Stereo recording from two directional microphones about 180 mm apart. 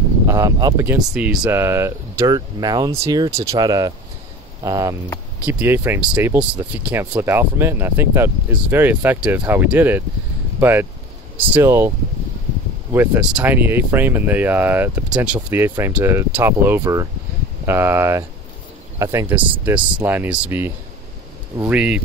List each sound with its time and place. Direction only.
0.3 s speech: 20° right (ahead or behind)
12.9 s speech: 10° right (ahead or behind)